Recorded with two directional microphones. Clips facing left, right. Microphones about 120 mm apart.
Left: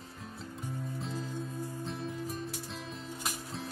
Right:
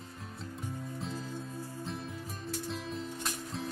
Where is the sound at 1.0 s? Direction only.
Centre (ahead or behind).